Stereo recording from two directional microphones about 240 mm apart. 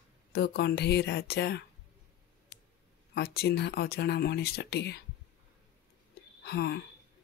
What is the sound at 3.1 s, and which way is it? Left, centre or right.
Speech, left.